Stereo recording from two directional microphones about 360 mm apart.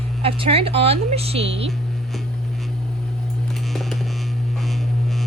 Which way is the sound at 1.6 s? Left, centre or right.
Centre.